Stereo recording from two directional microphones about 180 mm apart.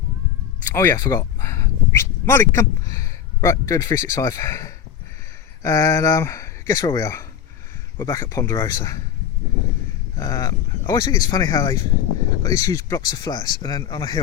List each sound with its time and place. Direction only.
0.7 s speech: 15° left (ahead or behind)
10.2 s speech: 20° left (ahead or behind)